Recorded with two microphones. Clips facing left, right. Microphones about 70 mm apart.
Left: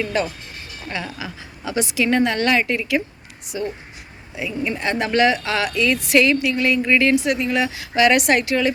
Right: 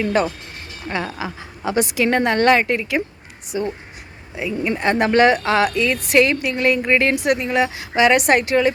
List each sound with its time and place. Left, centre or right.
0.0 s a woman's voice: right
4.7 s a woman's voice: right